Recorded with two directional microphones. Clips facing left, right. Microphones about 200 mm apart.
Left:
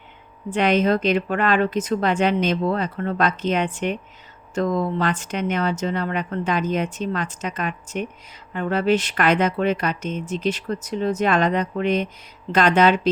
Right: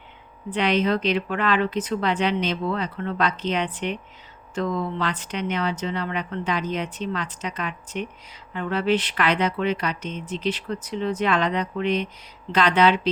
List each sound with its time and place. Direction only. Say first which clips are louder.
0.5 s speech: left 3 dB; 45° left (ahead or behind)